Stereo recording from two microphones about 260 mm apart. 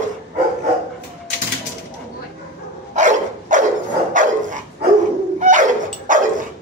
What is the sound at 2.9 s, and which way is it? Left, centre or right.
Dog, right.